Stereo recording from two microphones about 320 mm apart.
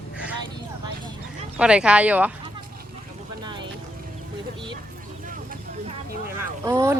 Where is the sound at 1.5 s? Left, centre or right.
Centre.